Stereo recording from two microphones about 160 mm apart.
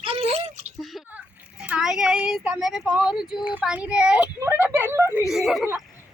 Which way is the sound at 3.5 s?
10° right (ahead or behind).